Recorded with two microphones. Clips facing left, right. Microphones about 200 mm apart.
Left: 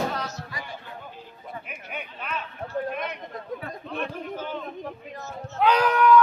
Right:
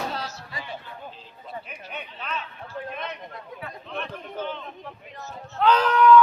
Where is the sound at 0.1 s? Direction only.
30° right (ahead or behind).